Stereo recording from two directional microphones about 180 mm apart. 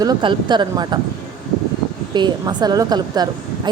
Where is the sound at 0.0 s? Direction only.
25° right (ahead or behind).